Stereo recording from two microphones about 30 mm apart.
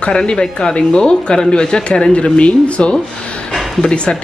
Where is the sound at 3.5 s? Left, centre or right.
Centre.